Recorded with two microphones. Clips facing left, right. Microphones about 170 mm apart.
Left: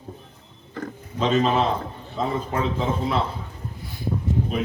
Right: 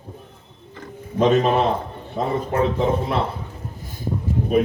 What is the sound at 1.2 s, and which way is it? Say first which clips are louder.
Speech: right 4 dB; 60° right (ahead or behind).